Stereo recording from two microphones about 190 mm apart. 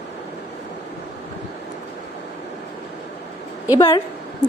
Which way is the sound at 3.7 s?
20° left (ahead or behind).